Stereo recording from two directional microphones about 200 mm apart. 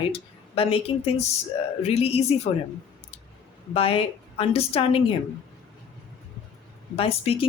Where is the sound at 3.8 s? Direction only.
30° left (ahead or behind).